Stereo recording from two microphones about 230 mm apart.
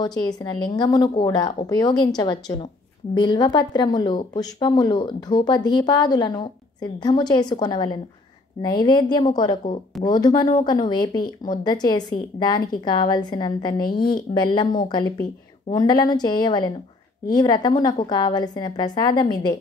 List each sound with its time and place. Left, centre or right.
0.0 s speech: centre
13.7 s a woman's voice: left
14.3 s speech: centre